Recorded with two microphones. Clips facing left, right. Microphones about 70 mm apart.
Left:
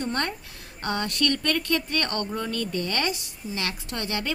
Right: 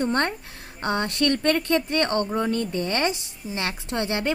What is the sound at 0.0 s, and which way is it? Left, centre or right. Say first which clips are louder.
Speech: right 5 dB; right.